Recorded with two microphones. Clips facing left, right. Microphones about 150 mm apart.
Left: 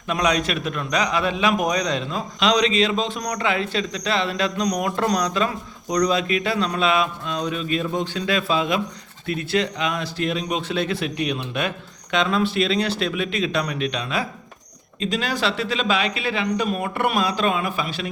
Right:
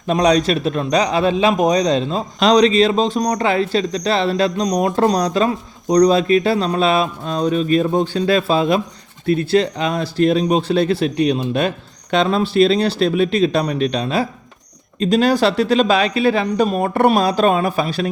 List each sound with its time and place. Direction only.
0.1 s a man's voice: 35° right (ahead or behind)